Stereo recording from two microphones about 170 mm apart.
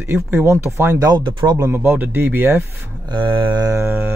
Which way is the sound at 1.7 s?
10° right (ahead or behind).